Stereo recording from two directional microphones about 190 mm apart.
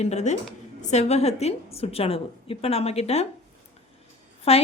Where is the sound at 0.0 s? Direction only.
35° left (ahead or behind).